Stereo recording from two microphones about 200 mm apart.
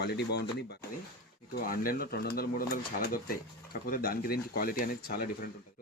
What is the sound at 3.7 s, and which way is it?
Speech, 45° left (ahead or behind).